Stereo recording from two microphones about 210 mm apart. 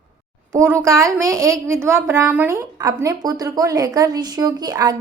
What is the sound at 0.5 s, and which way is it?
A woman's voice, 15° right (ahead or behind).